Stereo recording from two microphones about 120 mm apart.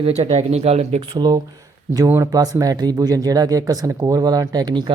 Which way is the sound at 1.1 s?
35° right (ahead or behind).